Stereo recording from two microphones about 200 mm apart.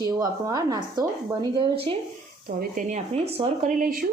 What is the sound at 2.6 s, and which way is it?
Speech, 40° right (ahead or behind).